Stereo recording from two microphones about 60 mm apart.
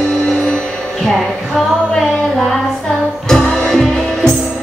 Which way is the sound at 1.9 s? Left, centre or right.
Centre.